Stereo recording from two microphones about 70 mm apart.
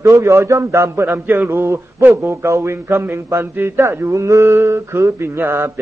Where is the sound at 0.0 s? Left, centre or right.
Right.